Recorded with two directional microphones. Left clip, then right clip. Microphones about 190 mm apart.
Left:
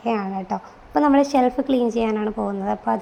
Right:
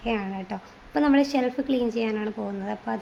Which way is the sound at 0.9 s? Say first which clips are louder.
Left 5 dB; centre (ahead or behind).